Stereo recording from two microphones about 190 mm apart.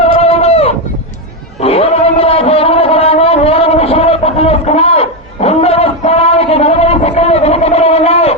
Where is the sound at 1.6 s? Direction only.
30° left (ahead or behind).